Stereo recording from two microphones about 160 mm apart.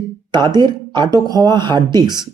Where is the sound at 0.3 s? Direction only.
25° right (ahead or behind).